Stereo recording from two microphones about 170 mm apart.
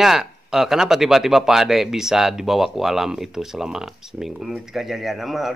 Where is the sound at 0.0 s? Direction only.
Centre (ahead or behind).